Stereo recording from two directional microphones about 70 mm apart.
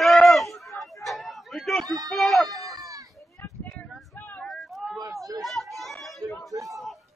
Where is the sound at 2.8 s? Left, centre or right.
Right.